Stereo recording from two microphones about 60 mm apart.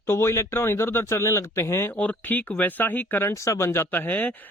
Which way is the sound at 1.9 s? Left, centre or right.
Left.